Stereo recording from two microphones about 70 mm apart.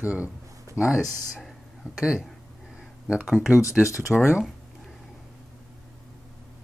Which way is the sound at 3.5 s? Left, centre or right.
Right.